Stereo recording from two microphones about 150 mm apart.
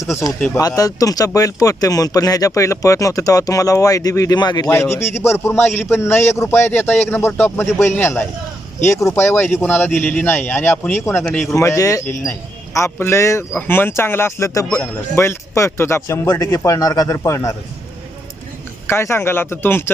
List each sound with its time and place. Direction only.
0.8 s speech: 25° left (ahead or behind)
4.7 s a man's voice: 15° left (ahead or behind)
11.2 s a man's voice: 5° left (ahead or behind)
11.5 s speech: 20° left (ahead or behind)
18.9 s a man's voice: 15° left (ahead or behind)